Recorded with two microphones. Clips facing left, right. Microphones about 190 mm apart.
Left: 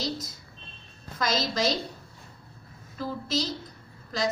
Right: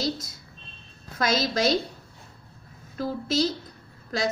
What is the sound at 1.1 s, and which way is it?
Speech, 60° right (ahead or behind).